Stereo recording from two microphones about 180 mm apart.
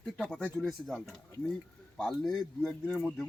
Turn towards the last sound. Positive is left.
turn(degrees=0)  # may be behind; listen again after turning